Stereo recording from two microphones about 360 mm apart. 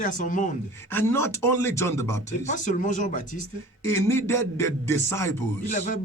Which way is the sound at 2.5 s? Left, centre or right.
Left.